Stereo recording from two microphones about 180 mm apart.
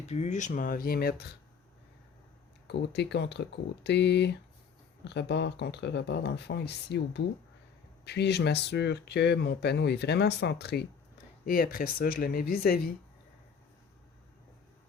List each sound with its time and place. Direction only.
0.1 s speech: 40° left (ahead or behind); by 1.4 s 60° left (ahead or behind)
2.6 s speech: 70° left (ahead or behind)
11.4 s speech: 55° left (ahead or behind)